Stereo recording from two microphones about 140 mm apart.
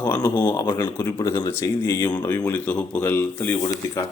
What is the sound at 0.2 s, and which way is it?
Speech, 25° left (ahead or behind).